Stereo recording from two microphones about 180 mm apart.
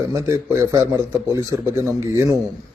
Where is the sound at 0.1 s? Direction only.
15° right (ahead or behind).